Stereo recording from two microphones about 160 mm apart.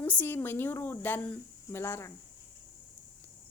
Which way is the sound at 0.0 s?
10° left (ahead or behind).